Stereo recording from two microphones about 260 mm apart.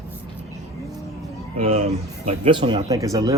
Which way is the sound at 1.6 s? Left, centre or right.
Right.